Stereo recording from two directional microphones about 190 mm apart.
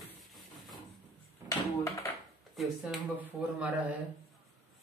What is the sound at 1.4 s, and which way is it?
Speech, 15° left (ahead or behind).